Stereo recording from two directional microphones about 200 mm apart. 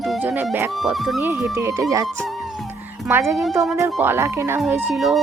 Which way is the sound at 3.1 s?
15° right (ahead or behind).